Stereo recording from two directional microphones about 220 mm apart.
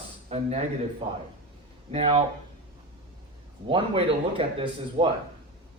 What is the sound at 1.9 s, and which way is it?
Speech, 30° right (ahead or behind).